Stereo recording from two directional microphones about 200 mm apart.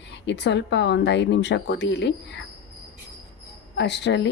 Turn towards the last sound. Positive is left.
turn(degrees=60)  # may be behind; listen again after turning